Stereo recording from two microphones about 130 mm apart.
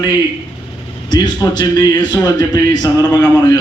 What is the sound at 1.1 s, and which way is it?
A man's voice, 30° left (ahead or behind).